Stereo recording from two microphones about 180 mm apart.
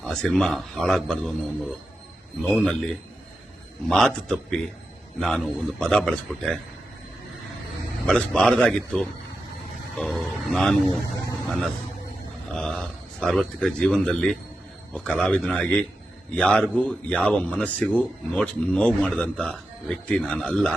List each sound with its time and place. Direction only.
0.0 s speech: 5° left (ahead or behind)
8.0 s speech: 5° left (ahead or behind)
12.5 s speech: 5° left (ahead or behind)